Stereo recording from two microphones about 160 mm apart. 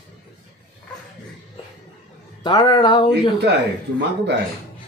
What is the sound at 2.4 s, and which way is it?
Speech, 25° left (ahead or behind).